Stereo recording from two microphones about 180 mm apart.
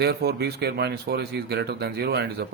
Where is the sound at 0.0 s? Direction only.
60° right (ahead or behind).